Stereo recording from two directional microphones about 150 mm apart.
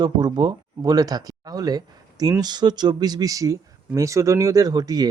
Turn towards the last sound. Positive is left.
turn(degrees=-25)  # may be behind; listen again after turning